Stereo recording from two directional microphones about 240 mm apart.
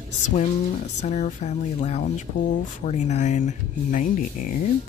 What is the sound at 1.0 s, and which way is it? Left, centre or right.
Speech, left.